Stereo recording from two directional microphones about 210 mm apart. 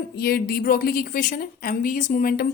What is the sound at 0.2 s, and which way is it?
A woman's voice, 45° left (ahead or behind).